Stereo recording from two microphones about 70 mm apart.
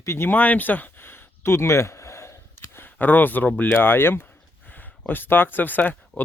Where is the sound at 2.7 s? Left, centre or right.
Left.